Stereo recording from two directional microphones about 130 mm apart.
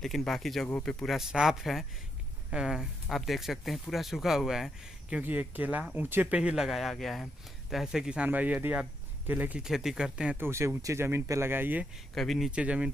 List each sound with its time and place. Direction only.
0.0 s speech: centre (ahead or behind)
10.3 s speech: 20° right (ahead or behind)
12.1 s speech: centre (ahead or behind)